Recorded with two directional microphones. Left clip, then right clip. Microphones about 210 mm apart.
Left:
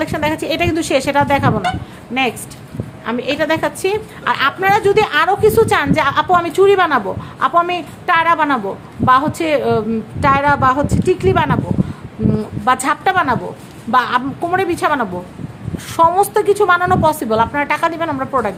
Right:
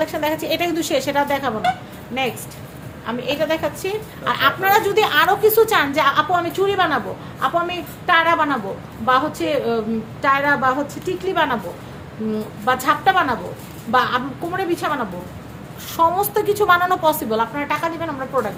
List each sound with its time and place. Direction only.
0.0 s a woman's voice: 45° left (ahead or behind)
3.1 s a woman's voice: 55° left (ahead or behind)
12.6 s a woman's voice: 45° left (ahead or behind)
16.0 s a woman's voice: 40° left (ahead or behind)